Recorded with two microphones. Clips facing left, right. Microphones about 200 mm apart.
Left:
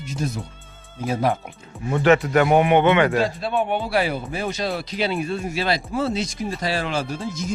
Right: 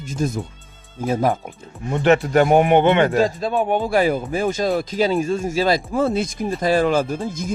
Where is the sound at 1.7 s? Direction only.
Centre (ahead or behind).